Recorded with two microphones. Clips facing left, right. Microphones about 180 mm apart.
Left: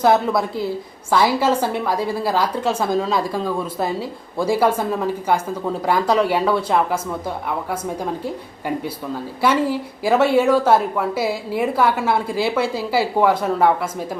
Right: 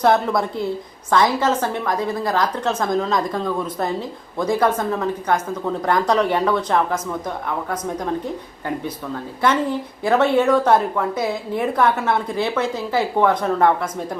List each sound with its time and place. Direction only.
0.0 s a woman's voice: 5° left (ahead or behind)
9.4 s a woman's voice: 10° left (ahead or behind)